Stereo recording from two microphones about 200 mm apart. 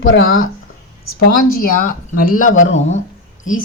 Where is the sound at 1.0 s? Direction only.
50° left (ahead or behind).